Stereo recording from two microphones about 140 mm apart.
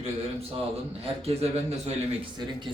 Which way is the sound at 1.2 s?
50° right (ahead or behind).